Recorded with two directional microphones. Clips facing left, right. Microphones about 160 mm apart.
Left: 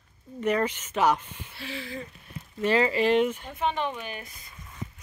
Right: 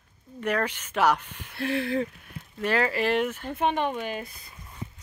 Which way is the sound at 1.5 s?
60° right (ahead or behind).